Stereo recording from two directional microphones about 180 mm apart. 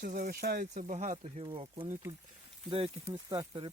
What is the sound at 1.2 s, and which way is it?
Speech, 30° right (ahead or behind).